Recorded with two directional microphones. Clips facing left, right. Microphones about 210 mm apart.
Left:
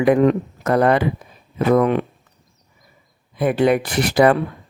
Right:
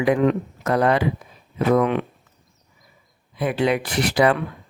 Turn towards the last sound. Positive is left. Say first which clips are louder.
# left 4 dB
turn(degrees=45)  # may be behind; listen again after turning